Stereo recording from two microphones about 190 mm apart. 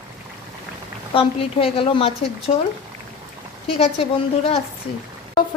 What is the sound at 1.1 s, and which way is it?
A woman's voice, 30° left (ahead or behind).